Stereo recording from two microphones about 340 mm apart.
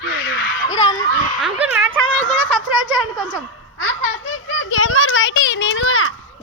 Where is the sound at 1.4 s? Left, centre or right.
Centre.